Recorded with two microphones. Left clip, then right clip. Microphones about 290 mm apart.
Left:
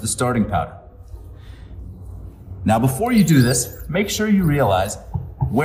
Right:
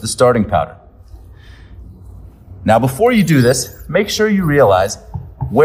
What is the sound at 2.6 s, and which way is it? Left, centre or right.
Speech, right.